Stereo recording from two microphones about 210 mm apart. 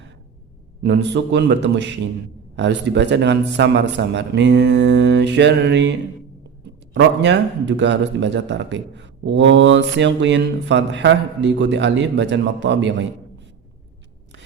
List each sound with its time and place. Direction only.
0.8 s a man's voice: 55° right (ahead or behind)